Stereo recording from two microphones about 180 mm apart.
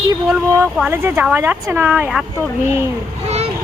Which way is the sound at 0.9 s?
15° right (ahead or behind).